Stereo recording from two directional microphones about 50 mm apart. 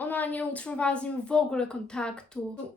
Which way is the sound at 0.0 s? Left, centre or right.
Left.